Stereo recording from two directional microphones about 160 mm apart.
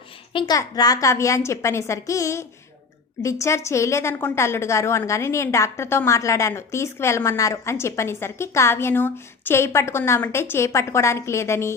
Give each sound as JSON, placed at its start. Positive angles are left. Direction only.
{"t": 0.3, "sound": "a woman's voice", "side_deg": 25}